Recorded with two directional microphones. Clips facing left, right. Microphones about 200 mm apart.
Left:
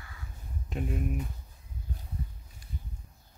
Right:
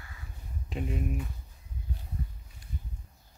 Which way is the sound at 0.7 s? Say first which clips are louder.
Even; centre (ahead or behind).